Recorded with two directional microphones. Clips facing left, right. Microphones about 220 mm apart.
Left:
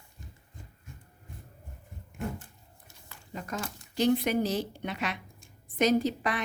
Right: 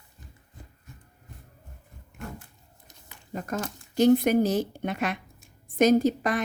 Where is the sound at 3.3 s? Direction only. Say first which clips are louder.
Right 5 dB; 45° right (ahead or behind).